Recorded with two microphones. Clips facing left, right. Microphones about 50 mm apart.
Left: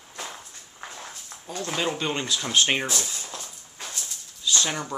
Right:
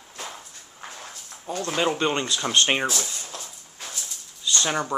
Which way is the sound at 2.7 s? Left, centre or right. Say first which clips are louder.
Right 2 dB; centre.